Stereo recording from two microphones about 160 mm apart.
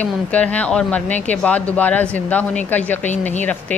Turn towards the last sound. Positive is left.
turn(degrees=10)  # may be behind; listen again after turning